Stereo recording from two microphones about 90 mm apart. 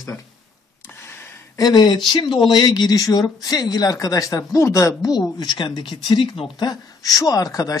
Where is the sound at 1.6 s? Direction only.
50° left (ahead or behind); by 5.1 s 35° left (ahead or behind).